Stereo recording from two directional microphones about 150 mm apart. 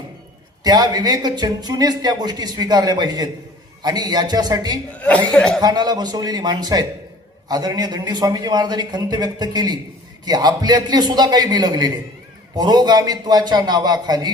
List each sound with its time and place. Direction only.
0.6 s a man's voice: 25° right (ahead or behind)
4.9 s speech: 10° left (ahead or behind)
5.5 s a man's voice: 25° right (ahead or behind)